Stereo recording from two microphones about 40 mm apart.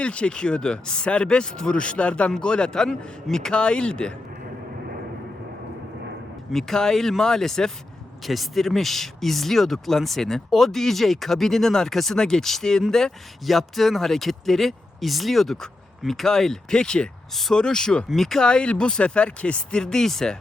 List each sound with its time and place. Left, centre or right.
0.0 s speech: left
6.5 s speech: centre
8.2 s speech: centre
18.4 s speech: left